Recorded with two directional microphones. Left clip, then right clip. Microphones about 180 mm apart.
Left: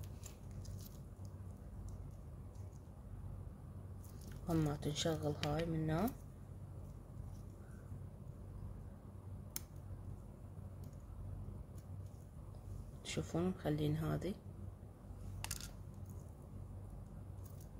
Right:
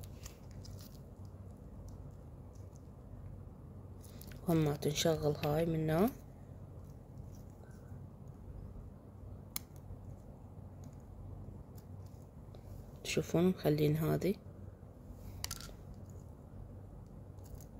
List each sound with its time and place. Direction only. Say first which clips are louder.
4.5 s speech: right 6 dB; 45° right (ahead or behind)
13.0 s speech: right 8 dB; 45° right (ahead or behind)